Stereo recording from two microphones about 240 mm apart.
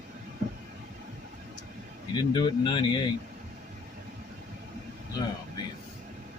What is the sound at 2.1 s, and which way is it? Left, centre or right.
Speech, centre.